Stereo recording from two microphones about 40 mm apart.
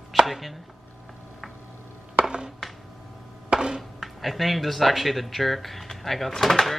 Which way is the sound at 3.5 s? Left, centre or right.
Centre.